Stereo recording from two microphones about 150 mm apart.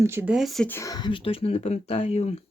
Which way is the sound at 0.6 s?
20° left (ahead or behind).